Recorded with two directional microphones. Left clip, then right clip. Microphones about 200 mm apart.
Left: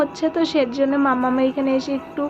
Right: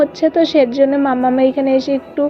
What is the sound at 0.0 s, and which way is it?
A woman's voice, 10° right (ahead or behind).